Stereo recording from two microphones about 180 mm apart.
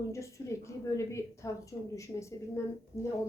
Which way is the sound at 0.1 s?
15° left (ahead or behind).